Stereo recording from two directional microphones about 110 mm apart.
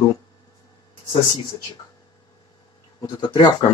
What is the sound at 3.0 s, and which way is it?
Speech, 45° left (ahead or behind).